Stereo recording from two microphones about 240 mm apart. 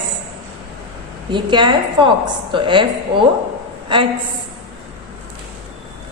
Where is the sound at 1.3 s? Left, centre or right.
Centre.